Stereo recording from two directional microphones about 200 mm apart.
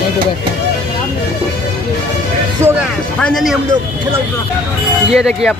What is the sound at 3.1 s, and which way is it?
Speech, 5° left (ahead or behind).